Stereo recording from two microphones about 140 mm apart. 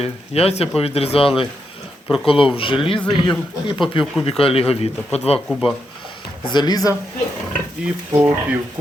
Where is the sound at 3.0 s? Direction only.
5° left (ahead or behind).